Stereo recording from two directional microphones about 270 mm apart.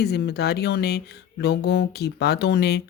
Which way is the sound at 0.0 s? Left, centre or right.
Left.